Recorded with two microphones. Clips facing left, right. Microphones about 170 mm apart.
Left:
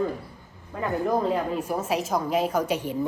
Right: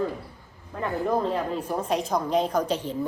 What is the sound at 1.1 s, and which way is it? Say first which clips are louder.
A woman's voice: left 1 dB; 10° left (ahead or behind).